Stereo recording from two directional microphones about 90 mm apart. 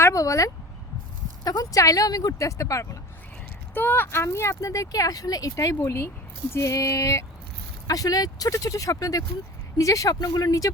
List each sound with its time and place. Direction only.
0.0 s speech: 35° left (ahead or behind)
3.8 s speech: 20° left (ahead or behind); by 10.7 s 40° left (ahead or behind)